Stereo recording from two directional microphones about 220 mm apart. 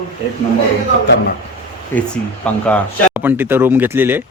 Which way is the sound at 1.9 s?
5° left (ahead or behind).